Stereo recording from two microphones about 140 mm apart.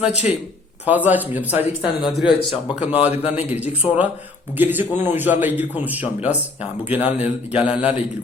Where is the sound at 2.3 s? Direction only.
40° left (ahead or behind).